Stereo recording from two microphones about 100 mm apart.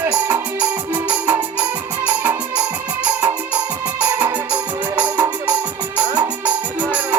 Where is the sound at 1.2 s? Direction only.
20° right (ahead or behind).